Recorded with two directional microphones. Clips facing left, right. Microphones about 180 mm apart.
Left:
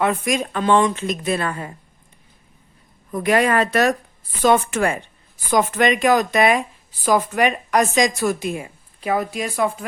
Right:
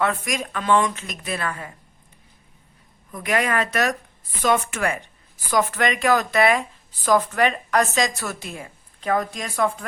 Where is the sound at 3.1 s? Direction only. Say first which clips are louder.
Left 5 dB; 35° left (ahead or behind).